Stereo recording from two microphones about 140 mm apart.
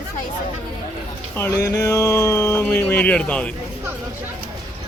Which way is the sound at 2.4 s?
15° left (ahead or behind).